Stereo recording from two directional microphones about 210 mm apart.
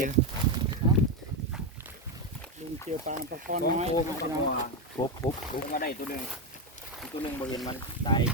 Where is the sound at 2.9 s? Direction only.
35° right (ahead or behind).